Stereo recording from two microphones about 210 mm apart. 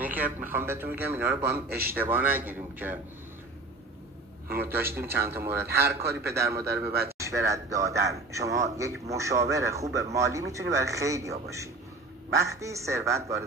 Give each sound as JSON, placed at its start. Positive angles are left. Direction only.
{"t": 0.0, "sound": "a sound", "side_deg": -10}
{"t": 0.5, "sound": "a man's voice", "side_deg": -10}
{"t": 1.5, "sound": "a man's voice", "side_deg": -45}
{"t": 2.0, "sound": "a man's voice", "side_deg": -10}
{"t": 4.5, "sound": "a man's voice", "side_deg": -10}